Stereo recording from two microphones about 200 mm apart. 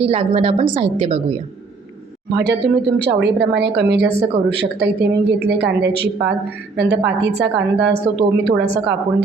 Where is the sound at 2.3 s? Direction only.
60° right (ahead or behind).